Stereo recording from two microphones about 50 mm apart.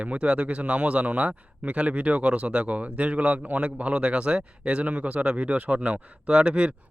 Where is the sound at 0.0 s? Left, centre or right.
Right.